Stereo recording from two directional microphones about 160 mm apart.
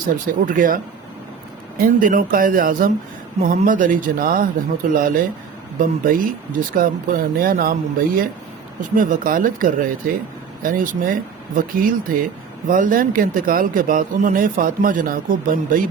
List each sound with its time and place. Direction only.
0.3 s speech: 55° right (ahead or behind)
1.8 s speech: 60° right (ahead or behind)